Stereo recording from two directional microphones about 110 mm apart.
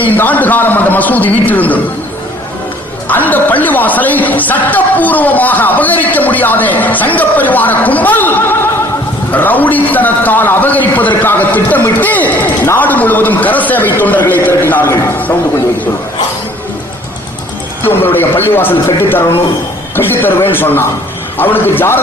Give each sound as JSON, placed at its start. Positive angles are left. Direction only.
{"t": 0.0, "sound": "a man's voice", "side_deg": 15}
{"t": 3.1, "sound": "a man's voice", "side_deg": 15}
{"t": 17.8, "sound": "a man's voice", "side_deg": 20}